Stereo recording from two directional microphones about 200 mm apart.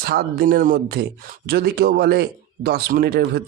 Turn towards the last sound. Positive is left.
turn(degrees=-55)  # may be behind; listen again after turning